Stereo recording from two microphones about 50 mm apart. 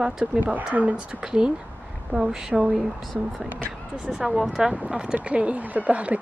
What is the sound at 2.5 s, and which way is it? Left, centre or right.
A woman's voice, centre.